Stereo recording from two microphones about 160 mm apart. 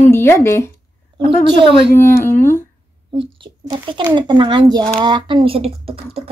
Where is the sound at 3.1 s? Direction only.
30° right (ahead or behind).